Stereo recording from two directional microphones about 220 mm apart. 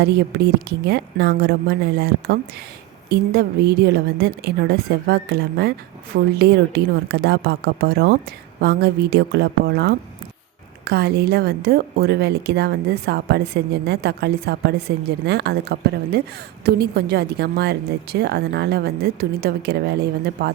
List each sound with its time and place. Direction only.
0.0 s a woman's voice: 50° right (ahead or behind)